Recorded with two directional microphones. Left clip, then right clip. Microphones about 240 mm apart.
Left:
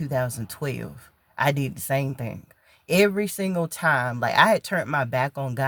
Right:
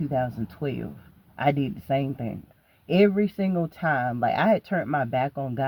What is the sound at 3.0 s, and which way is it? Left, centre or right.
Speech, left.